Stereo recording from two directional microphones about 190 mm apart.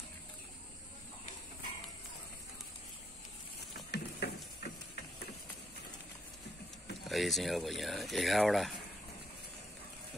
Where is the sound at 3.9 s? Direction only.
60° left (ahead or behind).